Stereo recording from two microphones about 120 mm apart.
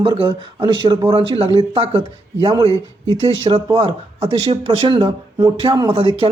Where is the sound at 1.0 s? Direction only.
45° right (ahead or behind).